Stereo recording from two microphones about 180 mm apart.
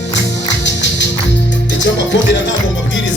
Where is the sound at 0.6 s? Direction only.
80° left.